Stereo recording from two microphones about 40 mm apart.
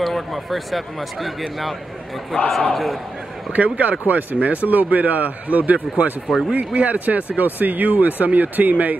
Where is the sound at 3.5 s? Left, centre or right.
Right.